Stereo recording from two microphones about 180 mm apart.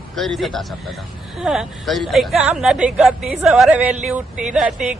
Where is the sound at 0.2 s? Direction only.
Centre (ahead or behind).